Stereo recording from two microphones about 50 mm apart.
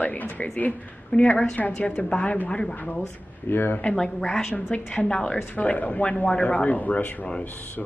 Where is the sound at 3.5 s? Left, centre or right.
Left.